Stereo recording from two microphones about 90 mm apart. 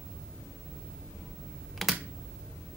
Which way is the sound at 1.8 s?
Centre (ahead or behind).